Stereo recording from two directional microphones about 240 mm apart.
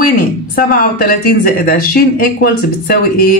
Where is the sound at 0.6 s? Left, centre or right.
Left.